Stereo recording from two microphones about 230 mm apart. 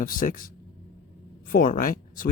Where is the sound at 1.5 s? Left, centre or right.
Left.